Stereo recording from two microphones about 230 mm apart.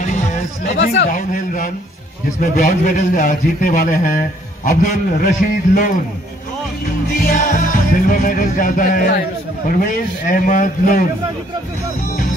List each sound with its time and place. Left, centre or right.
0.0 s speech: left
2.5 s music: left
7.1 s music: left